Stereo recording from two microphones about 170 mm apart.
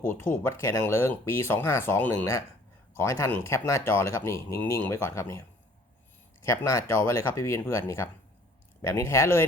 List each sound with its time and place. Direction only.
0.1 s speech: 15° left (ahead or behind)